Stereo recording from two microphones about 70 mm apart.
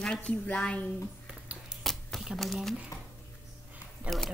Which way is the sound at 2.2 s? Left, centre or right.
Centre.